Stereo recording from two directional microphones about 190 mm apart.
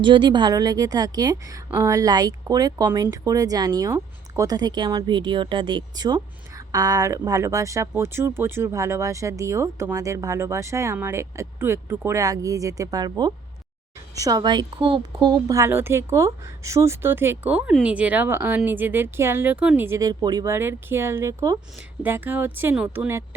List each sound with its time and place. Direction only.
0.0 s a woman's voice: 25° right (ahead or behind)